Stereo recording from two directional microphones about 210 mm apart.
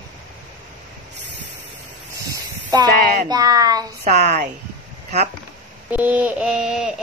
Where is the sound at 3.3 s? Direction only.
15° right (ahead or behind).